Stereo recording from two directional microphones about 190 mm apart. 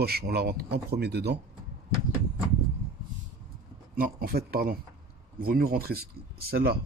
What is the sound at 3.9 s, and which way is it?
Speech, 50° right (ahead or behind).